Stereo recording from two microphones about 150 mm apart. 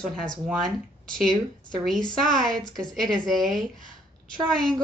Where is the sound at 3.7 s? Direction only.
60° right (ahead or behind).